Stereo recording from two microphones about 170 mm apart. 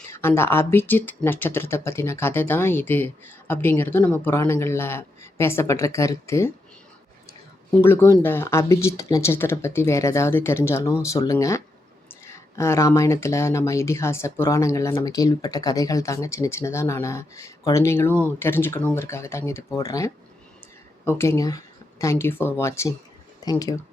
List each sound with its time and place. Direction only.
0.1 s speech: 15° left (ahead or behind)
7.8 s speech: 15° left (ahead or behind)